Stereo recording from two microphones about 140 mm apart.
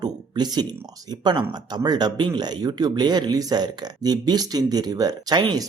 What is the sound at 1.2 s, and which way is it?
Speech, 30° right (ahead or behind).